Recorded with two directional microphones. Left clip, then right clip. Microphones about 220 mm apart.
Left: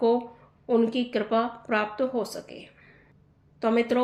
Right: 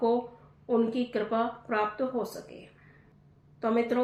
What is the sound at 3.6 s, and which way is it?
Speech, 45° left (ahead or behind).